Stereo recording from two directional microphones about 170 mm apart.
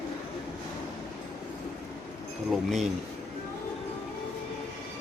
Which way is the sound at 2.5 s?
Centre (ahead or behind).